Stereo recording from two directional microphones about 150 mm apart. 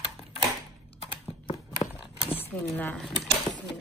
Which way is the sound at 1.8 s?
30° left (ahead or behind).